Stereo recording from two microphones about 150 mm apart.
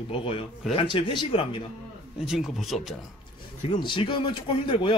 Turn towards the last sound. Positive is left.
turn(degrees=35)  # may be behind; listen again after turning